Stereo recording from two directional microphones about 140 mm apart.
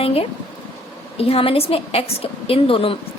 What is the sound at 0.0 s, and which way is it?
A woman's voice, 45° left (ahead or behind).